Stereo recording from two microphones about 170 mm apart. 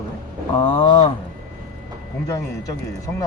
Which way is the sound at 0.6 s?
30° left (ahead or behind).